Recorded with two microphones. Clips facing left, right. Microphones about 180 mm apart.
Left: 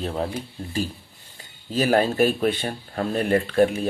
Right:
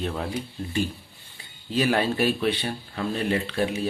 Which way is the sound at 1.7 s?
40° left (ahead or behind).